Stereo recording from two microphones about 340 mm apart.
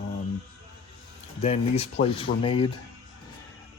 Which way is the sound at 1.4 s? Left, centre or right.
Centre.